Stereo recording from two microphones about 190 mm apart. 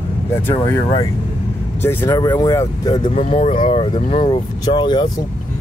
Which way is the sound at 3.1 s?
35° left (ahead or behind).